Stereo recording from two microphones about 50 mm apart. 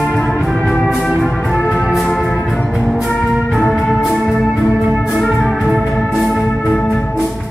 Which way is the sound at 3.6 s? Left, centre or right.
Centre.